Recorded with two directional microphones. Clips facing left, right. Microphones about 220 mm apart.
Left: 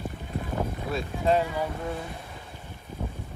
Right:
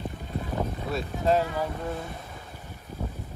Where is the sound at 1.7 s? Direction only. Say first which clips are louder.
Even; centre (ahead or behind).